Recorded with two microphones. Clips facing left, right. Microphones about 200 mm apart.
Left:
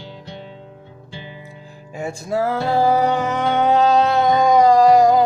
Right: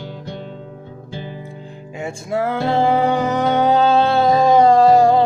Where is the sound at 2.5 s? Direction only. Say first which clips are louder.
Right 1 dB; 25° right (ahead or behind).